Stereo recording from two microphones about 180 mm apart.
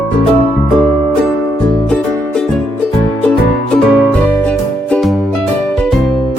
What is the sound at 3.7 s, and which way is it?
Music, 5° left (ahead or behind).